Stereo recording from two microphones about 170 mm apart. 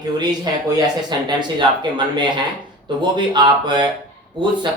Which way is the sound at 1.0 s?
25° right (ahead or behind).